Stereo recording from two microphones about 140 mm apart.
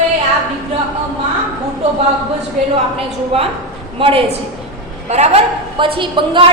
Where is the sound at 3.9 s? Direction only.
40° right (ahead or behind).